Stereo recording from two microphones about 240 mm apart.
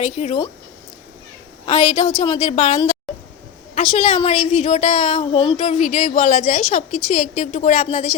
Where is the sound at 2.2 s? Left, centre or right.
Left.